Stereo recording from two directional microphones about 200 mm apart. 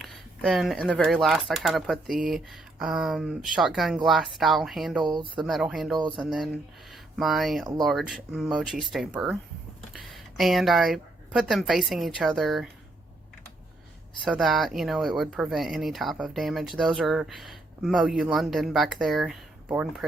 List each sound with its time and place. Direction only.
0.0 s speech: centre (ahead or behind)
5.0 s speech: 20° right (ahead or behind)
5.4 s speech: centre (ahead or behind)
14.3 s speech: centre (ahead or behind)